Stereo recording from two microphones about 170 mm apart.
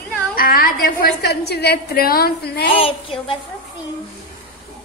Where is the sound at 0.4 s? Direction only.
55° left (ahead or behind).